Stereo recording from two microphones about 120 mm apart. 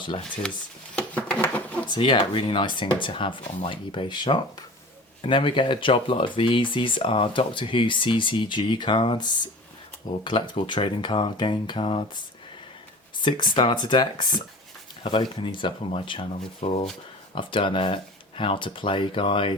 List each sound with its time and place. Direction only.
0.9 s a sound: 10° left (ahead or behind)
1.9 s speech: 45° left (ahead or behind)
13.2 s speech: 40° left (ahead or behind)
17.3 s speech: 45° left (ahead or behind)